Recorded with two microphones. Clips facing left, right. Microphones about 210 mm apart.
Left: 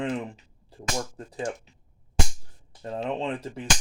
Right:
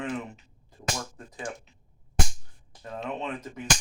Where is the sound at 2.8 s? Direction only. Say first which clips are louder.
Left 4 dB; 30° left (ahead or behind).